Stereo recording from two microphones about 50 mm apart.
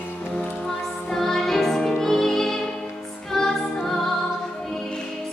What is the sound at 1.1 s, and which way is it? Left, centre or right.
Music, centre.